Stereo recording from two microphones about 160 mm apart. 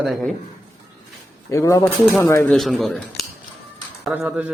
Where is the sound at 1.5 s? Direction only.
20° left (ahead or behind).